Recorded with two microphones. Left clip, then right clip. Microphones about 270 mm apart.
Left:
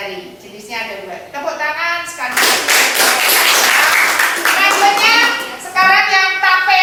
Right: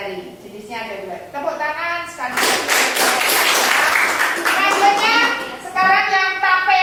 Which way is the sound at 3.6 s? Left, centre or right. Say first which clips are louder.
Left 4 dB; centre.